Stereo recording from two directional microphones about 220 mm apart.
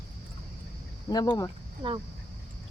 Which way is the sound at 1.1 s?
15° left (ahead or behind).